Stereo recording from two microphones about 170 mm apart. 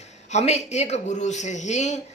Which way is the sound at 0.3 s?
40° left (ahead or behind).